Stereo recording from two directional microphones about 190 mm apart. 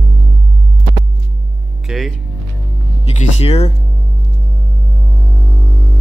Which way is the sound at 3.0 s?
35° left (ahead or behind).